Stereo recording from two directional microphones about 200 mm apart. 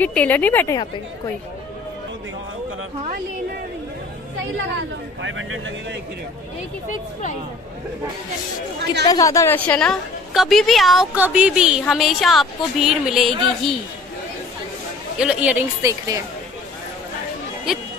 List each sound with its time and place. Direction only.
0.0 s speech: 5° left (ahead or behind)
5.2 s speech: 65° right (ahead or behind)
6.9 s speech: 35° left (ahead or behind)
9.0 s a woman's voice: 20° left (ahead or behind); by 13.7 s centre (ahead or behind)
15.1 s a woman's voice: 5° right (ahead or behind)
17.7 s a woman's voice: 5° right (ahead or behind)